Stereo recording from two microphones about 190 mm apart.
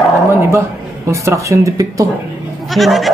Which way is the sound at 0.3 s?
15° right (ahead or behind).